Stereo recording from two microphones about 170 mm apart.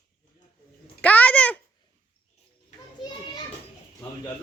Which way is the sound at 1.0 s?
10° left (ahead or behind).